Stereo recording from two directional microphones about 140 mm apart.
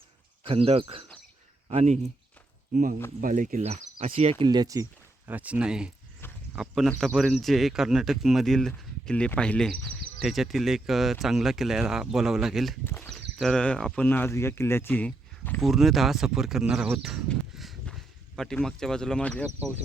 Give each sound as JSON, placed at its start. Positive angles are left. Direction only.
{"t": 0.4, "sound": "speech", "side_deg": -45}
{"t": 2.7, "sound": "speech", "side_deg": -75}
{"t": 3.6, "sound": "speech", "side_deg": -50}
{"t": 5.3, "sound": "speech", "side_deg": -10}
{"t": 12.8, "sound": "speech", "side_deg": 15}
{"t": 13.1, "sound": "speech", "side_deg": 5}
{"t": 15.6, "sound": "speech", "side_deg": 0}
{"t": 17.2, "sound": "a sound", "side_deg": 0}